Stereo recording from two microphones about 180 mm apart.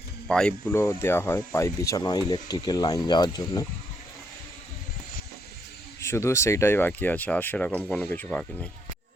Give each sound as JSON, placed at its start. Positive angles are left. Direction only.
{"t": 0.3, "sound": "speech", "side_deg": 5}
{"t": 6.0, "sound": "speech", "side_deg": 15}